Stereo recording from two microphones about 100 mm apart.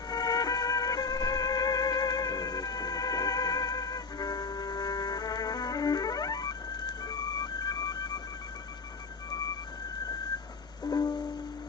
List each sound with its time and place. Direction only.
0.1 s music: 45° left (ahead or behind)
10.8 s music: 45° left (ahead or behind)